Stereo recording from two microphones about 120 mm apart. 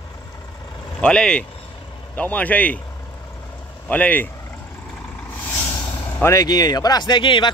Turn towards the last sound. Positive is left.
turn(degrees=40)  # may be behind; listen again after turning